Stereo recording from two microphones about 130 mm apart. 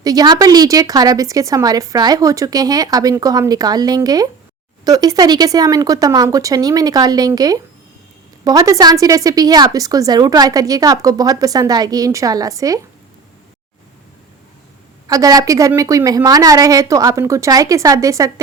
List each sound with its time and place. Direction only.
0.0 s a woman's voice: 30° right (ahead or behind)
15.0 s a woman's voice: 25° right (ahead or behind)